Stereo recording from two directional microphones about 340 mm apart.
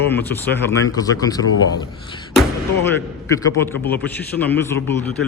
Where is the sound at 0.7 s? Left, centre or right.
Centre.